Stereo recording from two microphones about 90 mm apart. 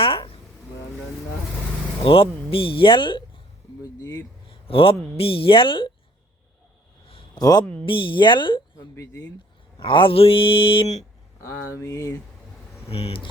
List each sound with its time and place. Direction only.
0.0 s a sound: 90° left
2.0 s speech: 90° left; by 3.2 s 65° left (ahead or behind)
4.4 s a sound: 90° left
5.1 s speech: 90° left; by 5.9 s 70° left (ahead or behind)
7.3 s speech: 50° left (ahead or behind)
7.9 s speech: 70° left (ahead or behind)
9.7 s speech: 70° left (ahead or behind)
11.4 s speech: 35° left (ahead or behind)
12.9 s speech: 90° left